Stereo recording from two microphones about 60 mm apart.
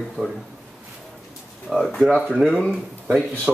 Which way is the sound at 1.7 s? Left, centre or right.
Centre.